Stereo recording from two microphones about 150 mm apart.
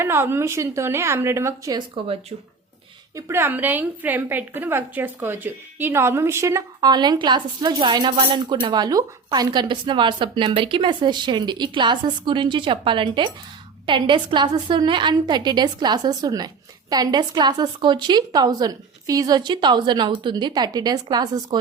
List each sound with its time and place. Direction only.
0.0 s a woman's voice: 15° right (ahead or behind)
3.2 s a woman's voice: 15° right (ahead or behind)